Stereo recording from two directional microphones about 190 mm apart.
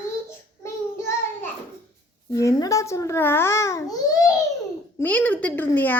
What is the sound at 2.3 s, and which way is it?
A child's voice, 15° left (ahead or behind).